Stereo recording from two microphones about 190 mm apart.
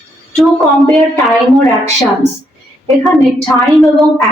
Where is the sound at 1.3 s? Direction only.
Centre (ahead or behind).